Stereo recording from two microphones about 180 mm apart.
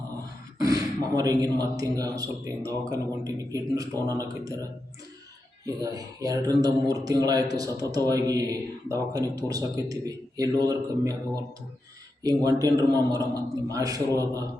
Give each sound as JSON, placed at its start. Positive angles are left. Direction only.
{"t": 0.6, "sound": "speech", "side_deg": -20}
{"t": 12.2, "sound": "speech", "side_deg": -20}